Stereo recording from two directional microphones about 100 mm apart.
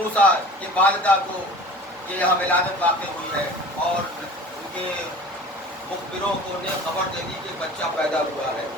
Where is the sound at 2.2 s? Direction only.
15° left (ahead or behind).